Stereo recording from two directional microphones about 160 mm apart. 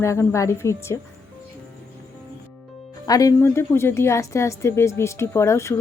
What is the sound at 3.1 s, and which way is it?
A woman's voice, 20° left (ahead or behind).